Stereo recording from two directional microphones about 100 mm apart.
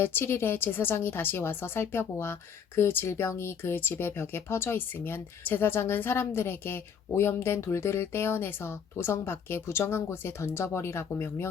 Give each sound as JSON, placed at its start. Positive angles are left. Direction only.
{"t": 0.0, "sound": "speech", "side_deg": 20}